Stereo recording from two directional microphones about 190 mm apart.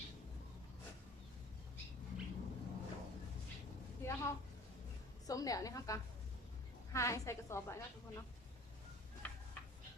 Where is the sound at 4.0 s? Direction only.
15° left (ahead or behind).